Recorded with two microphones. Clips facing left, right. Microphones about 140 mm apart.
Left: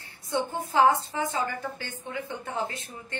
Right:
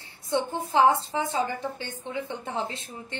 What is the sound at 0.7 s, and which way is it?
A woman's voice, 20° right (ahead or behind).